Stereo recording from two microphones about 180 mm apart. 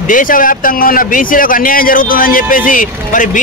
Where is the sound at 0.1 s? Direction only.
50° left (ahead or behind).